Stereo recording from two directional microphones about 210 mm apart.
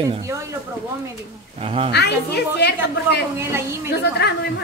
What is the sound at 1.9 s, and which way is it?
A woman's voice, 50° left (ahead or behind).